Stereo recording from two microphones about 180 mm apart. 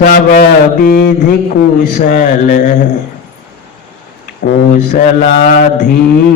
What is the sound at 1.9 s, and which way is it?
Speech, 45° left (ahead or behind).